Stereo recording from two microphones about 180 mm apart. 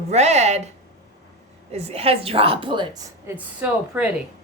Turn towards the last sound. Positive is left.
turn(degrees=-10)  # may be behind; listen again after turning